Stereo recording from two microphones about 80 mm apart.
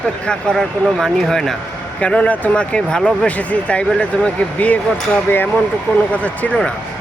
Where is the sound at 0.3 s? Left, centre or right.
Centre.